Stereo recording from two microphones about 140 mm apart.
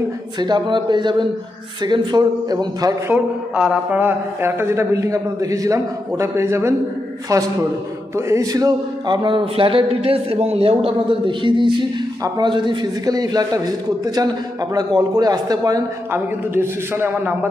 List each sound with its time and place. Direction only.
0.4 s a man's voice: 35° right (ahead or behind)
3.1 s a man's voice: 10° right (ahead or behind)
8.3 s a man's voice: 25° right (ahead or behind)
16.1 s a man's voice: 15° right (ahead or behind)